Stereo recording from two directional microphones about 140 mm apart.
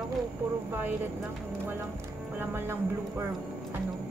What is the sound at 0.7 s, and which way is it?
Speech, 15° right (ahead or behind).